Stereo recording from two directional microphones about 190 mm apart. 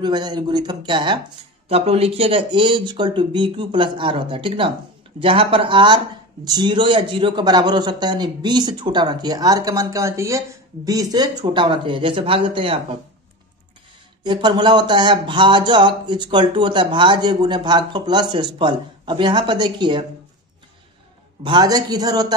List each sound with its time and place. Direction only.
0.0 s speech: 20° right (ahead or behind)
14.2 s speech: 25° right (ahead or behind)
21.5 s speech: 20° right (ahead or behind)